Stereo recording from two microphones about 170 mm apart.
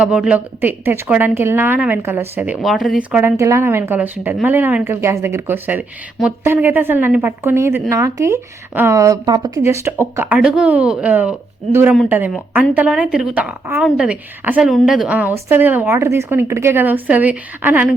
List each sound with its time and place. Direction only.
0.0 s a woman's voice: 5° right (ahead or behind)
12.3 s a woman's voice: centre (ahead or behind)